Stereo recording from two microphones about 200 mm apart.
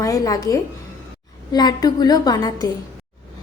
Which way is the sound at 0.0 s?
20° left (ahead or behind).